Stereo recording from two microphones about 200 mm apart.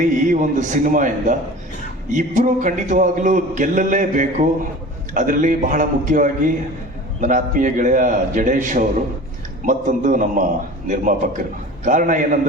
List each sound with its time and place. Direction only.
0.0 s a man's voice: 40° right (ahead or behind)